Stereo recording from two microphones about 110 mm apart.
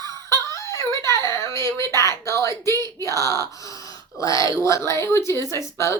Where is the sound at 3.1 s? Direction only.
30° right (ahead or behind).